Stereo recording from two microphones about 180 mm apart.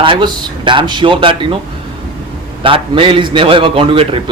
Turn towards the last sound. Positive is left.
turn(degrees=-30)  # may be behind; listen again after turning